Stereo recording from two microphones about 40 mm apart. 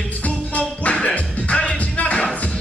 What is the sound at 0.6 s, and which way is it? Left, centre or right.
Music, left.